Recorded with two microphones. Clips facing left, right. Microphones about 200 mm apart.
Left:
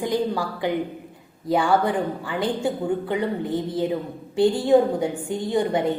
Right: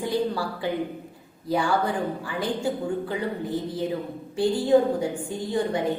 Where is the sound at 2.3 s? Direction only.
25° left (ahead or behind).